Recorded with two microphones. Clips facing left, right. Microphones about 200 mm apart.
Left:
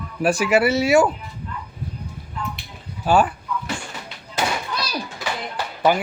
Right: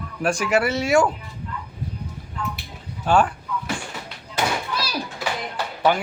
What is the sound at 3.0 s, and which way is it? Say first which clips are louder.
Speech: left 1 dB; 5° left (ahead or behind).